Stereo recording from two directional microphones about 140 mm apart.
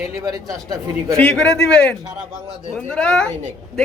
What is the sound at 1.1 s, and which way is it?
A woman's voice, 5° left (ahead or behind).